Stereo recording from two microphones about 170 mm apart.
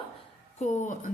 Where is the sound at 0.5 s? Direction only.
45° left (ahead or behind).